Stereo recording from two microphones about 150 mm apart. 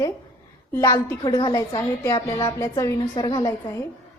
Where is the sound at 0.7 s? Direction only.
20° left (ahead or behind).